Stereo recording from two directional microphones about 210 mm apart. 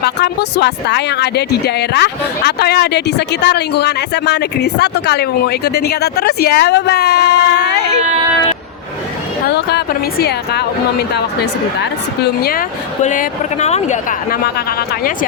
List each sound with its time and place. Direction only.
0.0 s speech: 55° left (ahead or behind)
9.6 s speech: 50° left (ahead or behind)